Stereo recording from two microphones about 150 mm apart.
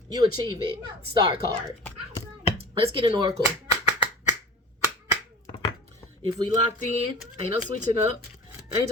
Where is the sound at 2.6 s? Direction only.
35° right (ahead or behind).